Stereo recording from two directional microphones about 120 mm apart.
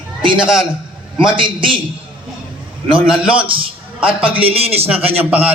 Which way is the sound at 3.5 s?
45° right (ahead or behind).